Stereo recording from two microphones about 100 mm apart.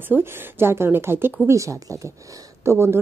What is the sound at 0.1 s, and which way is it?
A woman's voice, 20° right (ahead or behind).